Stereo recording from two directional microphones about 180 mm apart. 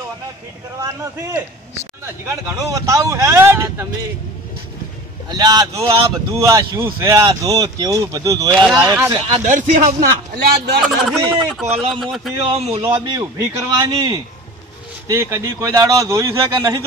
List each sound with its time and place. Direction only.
0.7 s a man's voice: 20° right (ahead or behind)
5.3 s a man's voice: 20° right (ahead or behind)
9.3 s a man's voice: 45° right (ahead or behind)
10.3 s a man's voice: 65° right (ahead or behind)
10.8 s a man's voice: centre (ahead or behind)
12.5 s a man's voice: 35° right (ahead or behind)
13.0 s a man's voice: 20° right (ahead or behind)